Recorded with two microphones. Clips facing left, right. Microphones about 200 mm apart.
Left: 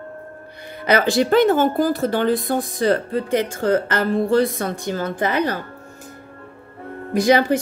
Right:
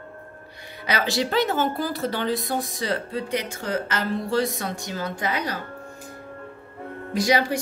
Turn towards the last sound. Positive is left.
turn(degrees=55)  # may be behind; listen again after turning